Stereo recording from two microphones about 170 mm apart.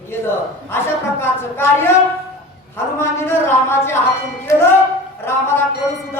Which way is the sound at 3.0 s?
15° left (ahead or behind).